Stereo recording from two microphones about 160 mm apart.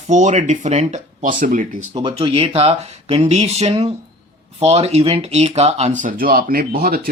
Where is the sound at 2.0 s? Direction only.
35° right (ahead or behind).